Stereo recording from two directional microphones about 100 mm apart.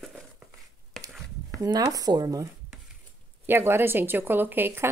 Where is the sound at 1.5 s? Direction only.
40° right (ahead or behind).